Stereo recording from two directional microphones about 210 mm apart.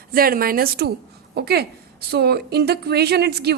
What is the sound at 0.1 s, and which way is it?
Speech, 45° right (ahead or behind).